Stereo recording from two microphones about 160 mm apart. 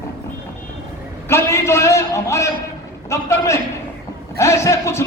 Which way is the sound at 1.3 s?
15° left (ahead or behind).